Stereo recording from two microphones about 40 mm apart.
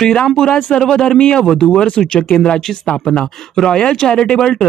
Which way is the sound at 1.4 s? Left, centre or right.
Centre.